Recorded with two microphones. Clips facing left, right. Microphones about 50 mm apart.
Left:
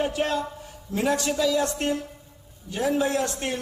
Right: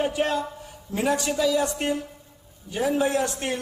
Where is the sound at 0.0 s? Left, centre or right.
Centre.